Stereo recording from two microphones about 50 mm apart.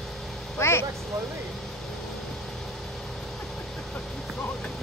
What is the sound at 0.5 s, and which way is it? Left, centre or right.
Speech, left.